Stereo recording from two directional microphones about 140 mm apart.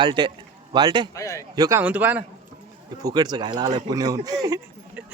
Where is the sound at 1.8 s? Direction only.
10° right (ahead or behind).